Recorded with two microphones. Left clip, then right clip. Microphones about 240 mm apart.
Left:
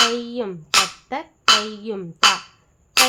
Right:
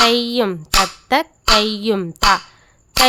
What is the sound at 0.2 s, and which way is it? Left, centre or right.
Speech, right.